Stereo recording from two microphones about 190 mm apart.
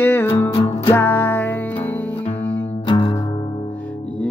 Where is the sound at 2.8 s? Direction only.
25° left (ahead or behind).